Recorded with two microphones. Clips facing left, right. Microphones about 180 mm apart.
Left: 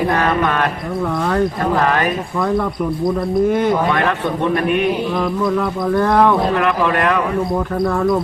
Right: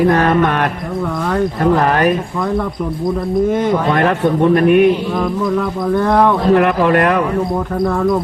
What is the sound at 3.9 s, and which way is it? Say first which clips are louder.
Speech: right 3 dB; 40° right (ahead or behind).